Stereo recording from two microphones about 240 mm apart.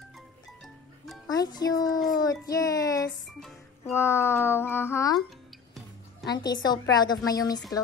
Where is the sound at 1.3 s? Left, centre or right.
Centre.